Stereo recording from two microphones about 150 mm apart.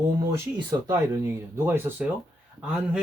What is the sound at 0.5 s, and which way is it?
Speech, 20° right (ahead or behind).